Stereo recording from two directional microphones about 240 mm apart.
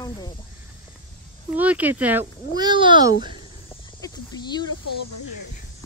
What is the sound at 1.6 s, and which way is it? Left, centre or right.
Speech, centre.